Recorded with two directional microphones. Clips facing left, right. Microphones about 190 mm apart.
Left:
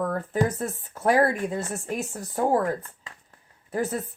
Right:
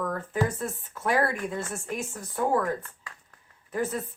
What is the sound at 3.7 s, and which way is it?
Speech, 40° left (ahead or behind).